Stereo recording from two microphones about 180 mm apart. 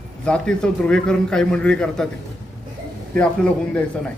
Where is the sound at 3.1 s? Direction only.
5° left (ahead or behind).